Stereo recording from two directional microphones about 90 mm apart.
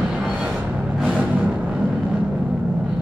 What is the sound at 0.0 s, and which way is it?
Music, 5° right (ahead or behind).